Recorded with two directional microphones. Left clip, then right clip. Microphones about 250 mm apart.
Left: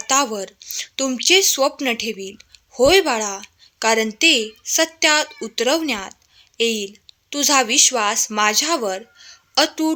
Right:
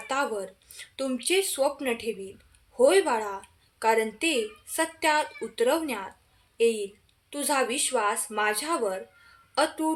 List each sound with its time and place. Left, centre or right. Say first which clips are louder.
0.1 s speech: left 9 dB; left